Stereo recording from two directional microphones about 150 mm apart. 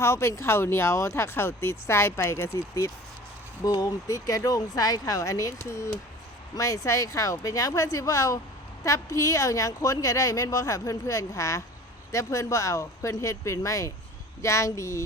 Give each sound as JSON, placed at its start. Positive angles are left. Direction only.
{"t": 0.0, "sound": "speech", "side_deg": 20}